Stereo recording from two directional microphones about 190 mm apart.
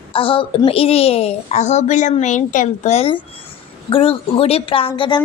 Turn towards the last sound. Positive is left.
turn(degrees=25)  # may be behind; listen again after turning